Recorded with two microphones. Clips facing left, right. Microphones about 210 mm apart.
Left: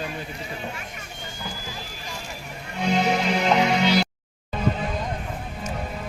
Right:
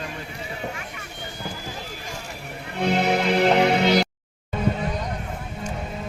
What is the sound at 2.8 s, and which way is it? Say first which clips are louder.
Music: right 1 dB; 60° right (ahead or behind).